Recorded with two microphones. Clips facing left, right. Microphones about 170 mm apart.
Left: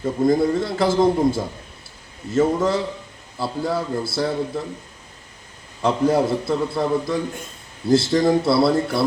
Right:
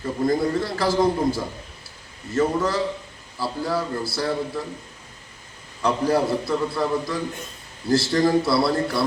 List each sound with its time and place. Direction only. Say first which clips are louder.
0.0 s a man's voice: left 4 dB; 20° left (ahead or behind)
5.8 s a man's voice: left 3 dB; 20° left (ahead or behind)